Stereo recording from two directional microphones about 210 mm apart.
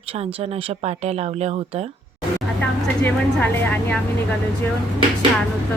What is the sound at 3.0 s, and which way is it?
Speech, 10° left (ahead or behind).